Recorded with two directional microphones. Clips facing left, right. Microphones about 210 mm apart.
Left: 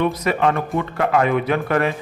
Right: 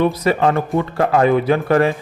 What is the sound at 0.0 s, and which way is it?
A man's voice, 35° right (ahead or behind).